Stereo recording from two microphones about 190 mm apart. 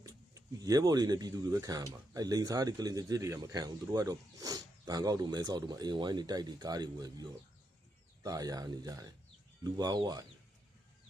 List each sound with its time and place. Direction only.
0.0 s speech: 20° right (ahead or behind)